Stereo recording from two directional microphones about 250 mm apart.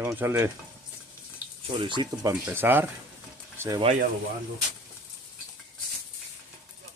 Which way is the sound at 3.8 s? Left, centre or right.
Right.